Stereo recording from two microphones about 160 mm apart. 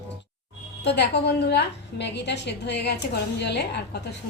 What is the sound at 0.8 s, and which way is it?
A woman's voice, 90° left.